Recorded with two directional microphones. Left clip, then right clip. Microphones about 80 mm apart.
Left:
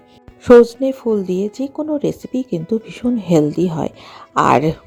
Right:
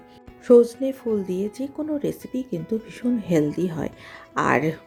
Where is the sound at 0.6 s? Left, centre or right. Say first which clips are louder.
Left 7 dB; left.